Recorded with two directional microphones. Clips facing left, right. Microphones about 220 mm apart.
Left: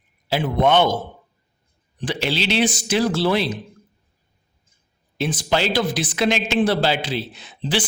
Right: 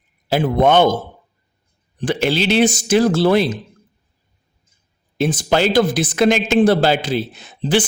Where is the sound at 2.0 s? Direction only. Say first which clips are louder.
Right 6 dB; 50° right (ahead or behind).